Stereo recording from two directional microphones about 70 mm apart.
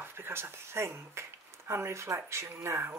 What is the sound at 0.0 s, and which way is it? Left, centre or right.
Speech, right.